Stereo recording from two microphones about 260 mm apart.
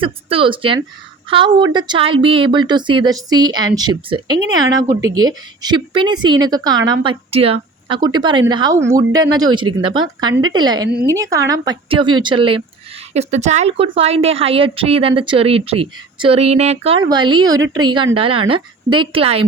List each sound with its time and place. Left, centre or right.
0.0 s a woman's voice: centre